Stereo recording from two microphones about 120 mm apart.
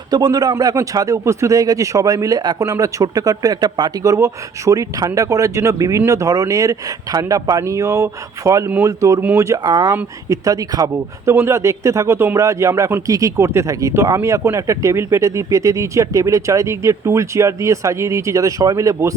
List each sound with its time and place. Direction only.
0.1 s speech: 35° right (ahead or behind)
9.6 s speech: 35° right (ahead or behind)